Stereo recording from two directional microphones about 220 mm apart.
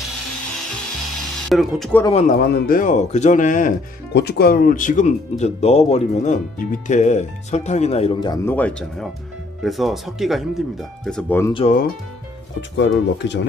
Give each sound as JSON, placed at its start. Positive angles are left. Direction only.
{"t": 1.5, "sound": "speech", "side_deg": 0}
{"t": 2.0, "sound": "speech", "side_deg": 30}
{"t": 2.3, "sound": "speech", "side_deg": 45}
{"t": 8.5, "sound": "speech", "side_deg": 5}
{"t": 11.5, "sound": "speech", "side_deg": 30}
{"t": 12.7, "sound": "speech", "side_deg": 55}